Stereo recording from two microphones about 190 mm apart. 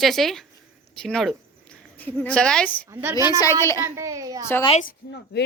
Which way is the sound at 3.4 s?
15° left (ahead or behind).